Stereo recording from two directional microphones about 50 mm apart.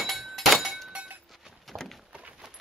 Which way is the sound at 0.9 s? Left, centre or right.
Right.